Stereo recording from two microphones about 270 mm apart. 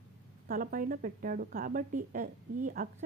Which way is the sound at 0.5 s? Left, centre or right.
Right.